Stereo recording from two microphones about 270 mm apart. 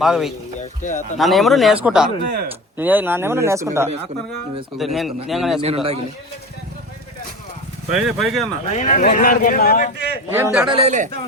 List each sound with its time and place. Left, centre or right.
0.0 s speech: centre
0.6 s speech: left
1.2 s speech: centre
4.8 s speech: centre
5.5 s a man's voice: right
7.9 s speech: centre
8.7 s speech: left
10.3 s speech: centre
10.8 s a man's voice: right